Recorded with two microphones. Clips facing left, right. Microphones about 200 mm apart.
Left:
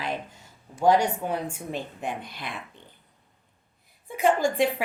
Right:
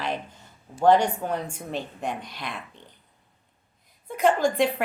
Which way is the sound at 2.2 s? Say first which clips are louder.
Right 1 dB; 55° left (ahead or behind).